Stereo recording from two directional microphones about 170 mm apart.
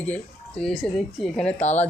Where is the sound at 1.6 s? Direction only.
40° left (ahead or behind).